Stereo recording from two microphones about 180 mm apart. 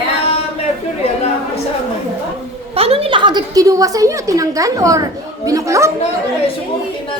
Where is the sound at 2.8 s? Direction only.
30° right (ahead or behind); by 5.9 s 15° right (ahead or behind).